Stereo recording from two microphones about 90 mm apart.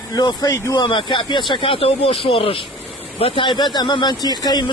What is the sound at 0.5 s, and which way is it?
Speech, 30° left (ahead or behind).